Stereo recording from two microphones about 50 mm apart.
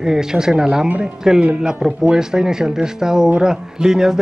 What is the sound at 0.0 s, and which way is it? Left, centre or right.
Speech, centre.